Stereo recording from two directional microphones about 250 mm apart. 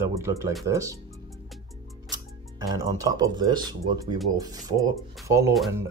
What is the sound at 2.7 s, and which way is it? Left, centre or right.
Speech, centre.